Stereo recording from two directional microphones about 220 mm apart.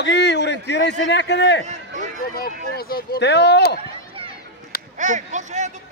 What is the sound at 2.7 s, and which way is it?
A man's voice, 45° left (ahead or behind).